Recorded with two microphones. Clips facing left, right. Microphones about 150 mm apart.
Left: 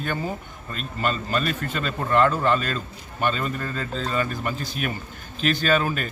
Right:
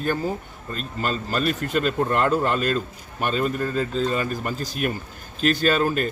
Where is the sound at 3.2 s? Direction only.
5° right (ahead or behind).